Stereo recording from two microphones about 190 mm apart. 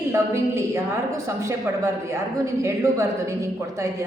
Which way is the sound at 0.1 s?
15° right (ahead or behind).